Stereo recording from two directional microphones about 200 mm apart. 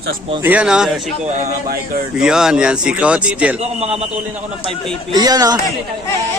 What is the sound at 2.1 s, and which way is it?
Speech, 5° right (ahead or behind).